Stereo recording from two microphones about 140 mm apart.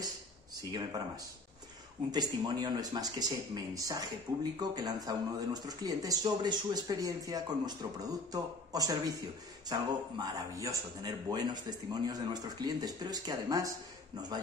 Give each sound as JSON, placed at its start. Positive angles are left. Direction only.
{"t": 0.6, "sound": "speech", "side_deg": -25}